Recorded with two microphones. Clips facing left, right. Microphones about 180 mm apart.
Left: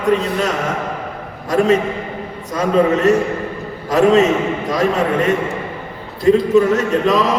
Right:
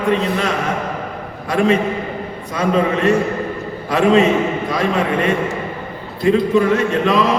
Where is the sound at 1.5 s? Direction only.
40° left (ahead or behind).